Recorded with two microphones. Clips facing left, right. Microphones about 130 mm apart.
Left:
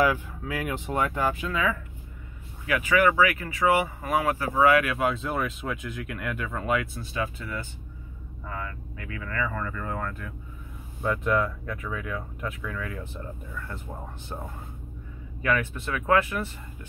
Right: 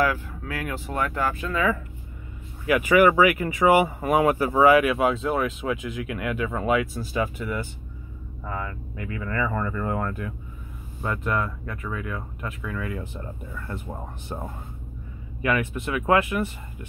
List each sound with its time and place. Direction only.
0.0 s speech: 15° left (ahead or behind)
2.6 s speech: 15° right (ahead or behind)
4.9 s speech: 5° right (ahead or behind)
9.4 s speech: 30° right (ahead or behind)
11.0 s speech: centre (ahead or behind)